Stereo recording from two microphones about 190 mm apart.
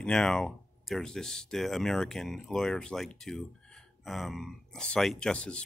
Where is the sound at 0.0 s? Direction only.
5° left (ahead or behind).